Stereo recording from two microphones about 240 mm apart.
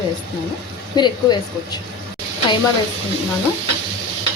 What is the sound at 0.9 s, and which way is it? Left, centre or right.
Speech, centre.